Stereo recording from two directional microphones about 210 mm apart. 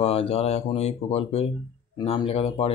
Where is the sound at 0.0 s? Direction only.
30° left (ahead or behind).